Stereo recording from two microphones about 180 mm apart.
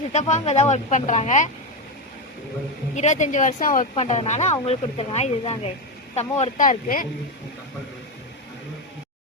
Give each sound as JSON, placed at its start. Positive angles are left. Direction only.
{"t": 0.1, "sound": "speech", "side_deg": 40}
{"t": 2.9, "sound": "speech", "side_deg": 40}